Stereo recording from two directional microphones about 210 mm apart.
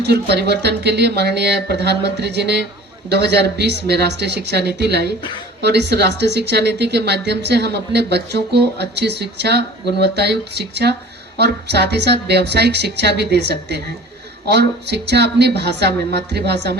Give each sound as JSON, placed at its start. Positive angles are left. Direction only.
{"t": 0.0, "sound": "speech", "side_deg": -50}